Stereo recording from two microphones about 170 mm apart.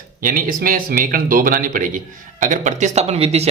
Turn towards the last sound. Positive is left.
turn(degrees=-35)  # may be behind; listen again after turning